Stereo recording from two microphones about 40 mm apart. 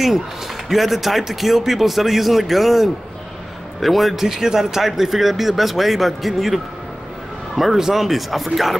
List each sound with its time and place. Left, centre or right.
0.7 s speech: centre